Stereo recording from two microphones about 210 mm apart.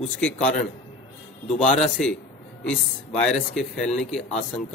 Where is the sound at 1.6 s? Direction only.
30° left (ahead or behind).